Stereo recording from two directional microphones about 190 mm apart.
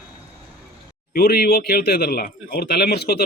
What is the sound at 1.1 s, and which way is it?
A man's voice, 55° left (ahead or behind).